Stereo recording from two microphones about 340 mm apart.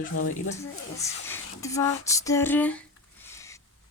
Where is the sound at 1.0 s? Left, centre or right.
Centre.